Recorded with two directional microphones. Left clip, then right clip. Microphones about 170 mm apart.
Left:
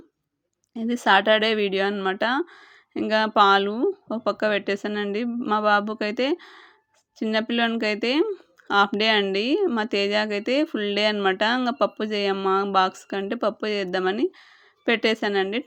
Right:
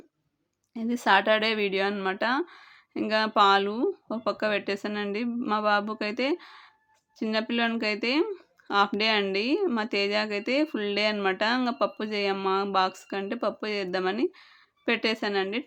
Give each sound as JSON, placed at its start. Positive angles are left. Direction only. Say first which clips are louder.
{"t": 0.7, "sound": "speech", "louder": "left 3 dB", "side_deg": 25}